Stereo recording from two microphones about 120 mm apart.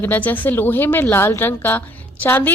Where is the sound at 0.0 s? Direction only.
15° left (ahead or behind).